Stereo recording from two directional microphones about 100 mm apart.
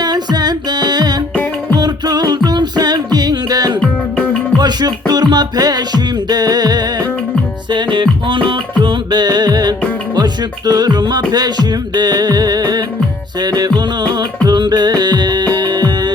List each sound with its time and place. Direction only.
0.0 s music: 40° right (ahead or behind)